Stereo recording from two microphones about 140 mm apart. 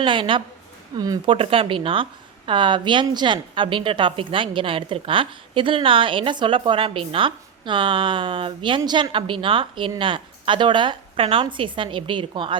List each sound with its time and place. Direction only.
0.0 s a woman's voice: 35° right (ahead or behind)
1.3 s a woman's voice: 40° right (ahead or behind)